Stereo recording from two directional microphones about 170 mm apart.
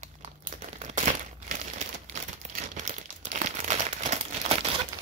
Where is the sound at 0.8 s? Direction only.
45° right (ahead or behind).